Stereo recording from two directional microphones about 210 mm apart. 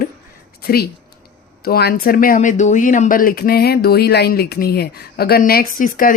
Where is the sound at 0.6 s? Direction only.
45° left (ahead or behind).